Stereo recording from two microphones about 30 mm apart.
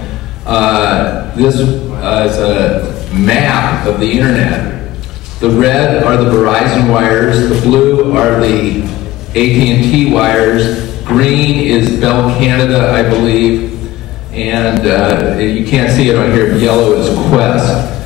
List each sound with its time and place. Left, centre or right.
0.5 s a man's voice: centre